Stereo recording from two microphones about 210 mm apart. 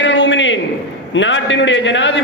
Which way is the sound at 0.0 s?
60° left (ahead or behind).